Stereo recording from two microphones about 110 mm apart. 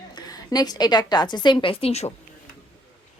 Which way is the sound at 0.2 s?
35° left (ahead or behind).